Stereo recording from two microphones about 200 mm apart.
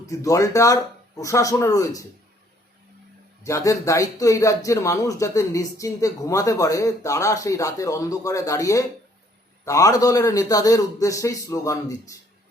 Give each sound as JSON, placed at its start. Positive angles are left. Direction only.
{"t": 0.0, "sound": "speech", "side_deg": 15}
{"t": 3.4, "sound": "speech", "side_deg": 15}